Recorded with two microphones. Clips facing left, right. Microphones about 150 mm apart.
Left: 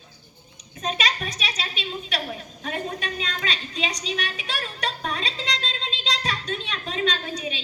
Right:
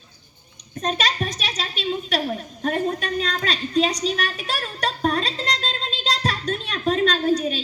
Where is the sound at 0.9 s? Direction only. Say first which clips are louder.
Right 3 dB; centre (ahead or behind).